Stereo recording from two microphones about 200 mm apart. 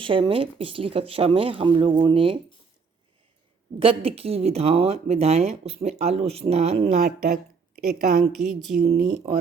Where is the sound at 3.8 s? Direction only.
25° right (ahead or behind).